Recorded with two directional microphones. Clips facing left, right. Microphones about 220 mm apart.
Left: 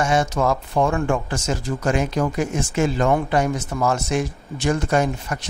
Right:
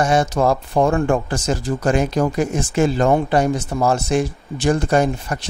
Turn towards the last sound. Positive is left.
turn(degrees=-35)  # may be behind; listen again after turning